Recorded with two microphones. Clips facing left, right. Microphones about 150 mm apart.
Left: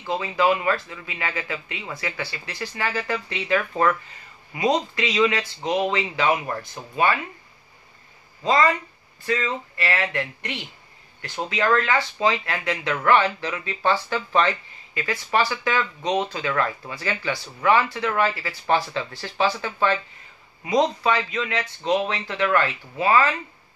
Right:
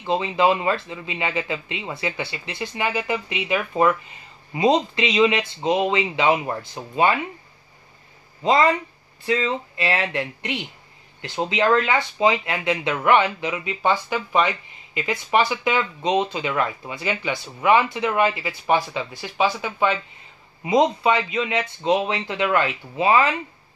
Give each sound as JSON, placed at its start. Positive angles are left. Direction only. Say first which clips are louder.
{"t": 0.0, "sound": "speech", "louder": "right 2 dB", "side_deg": -25}
{"t": 8.5, "sound": "speech", "louder": "right 2 dB", "side_deg": -20}